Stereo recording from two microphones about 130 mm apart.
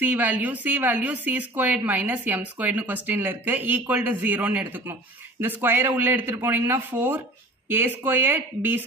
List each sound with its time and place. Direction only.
0.0 s speech: 15° right (ahead or behind)